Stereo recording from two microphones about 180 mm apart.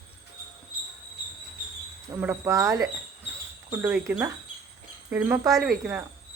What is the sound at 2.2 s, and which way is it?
Speech, 15° right (ahead or behind).